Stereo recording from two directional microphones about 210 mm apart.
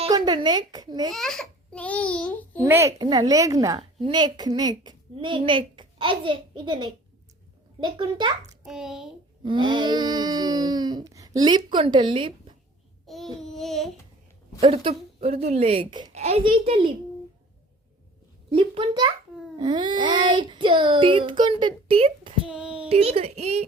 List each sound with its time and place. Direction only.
0.1 s a woman's voice: 20° right (ahead or behind)
1.1 s a child's voice: centre (ahead or behind)
2.6 s a woman's voice: 10° right (ahead or behind)
7.9 s a woman's voice: 20° right (ahead or behind)
8.6 s child singing: centre (ahead or behind)
9.4 s a woman's voice: 20° right (ahead or behind)
13.1 s child singing: centre (ahead or behind)
14.6 s a woman's voice: 25° right (ahead or behind)
18.5 s a woman's voice: 25° right (ahead or behind)
22.4 s child singing: 5° right (ahead or behind)
22.9 s a woman's voice: 30° right (ahead or behind)